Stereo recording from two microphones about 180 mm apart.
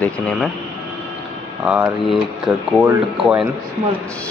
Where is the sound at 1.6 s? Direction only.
5° right (ahead or behind).